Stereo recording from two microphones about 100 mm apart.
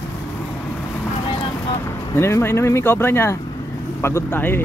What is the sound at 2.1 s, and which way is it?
Speech, 25° left (ahead or behind).